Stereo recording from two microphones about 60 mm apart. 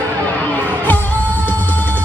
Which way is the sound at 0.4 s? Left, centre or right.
Left.